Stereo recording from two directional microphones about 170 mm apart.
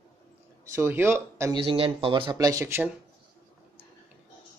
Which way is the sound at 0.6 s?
15° right (ahead or behind).